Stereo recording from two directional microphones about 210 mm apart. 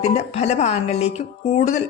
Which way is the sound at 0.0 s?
30° left (ahead or behind).